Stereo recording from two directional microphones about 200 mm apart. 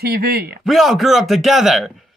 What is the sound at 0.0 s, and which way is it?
Speech, 50° right (ahead or behind).